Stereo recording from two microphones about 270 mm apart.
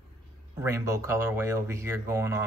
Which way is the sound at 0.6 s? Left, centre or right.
Centre.